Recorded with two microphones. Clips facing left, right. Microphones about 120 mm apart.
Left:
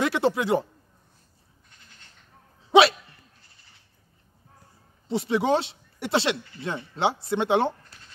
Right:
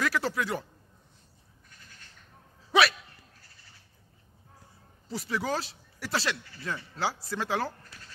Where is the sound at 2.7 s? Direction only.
25° left (ahead or behind).